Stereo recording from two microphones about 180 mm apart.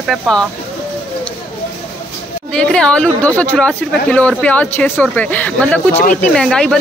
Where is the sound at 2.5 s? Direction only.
5° left (ahead or behind).